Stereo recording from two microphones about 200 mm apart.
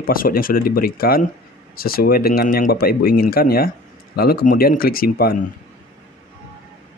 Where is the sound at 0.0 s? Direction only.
45° left (ahead or behind).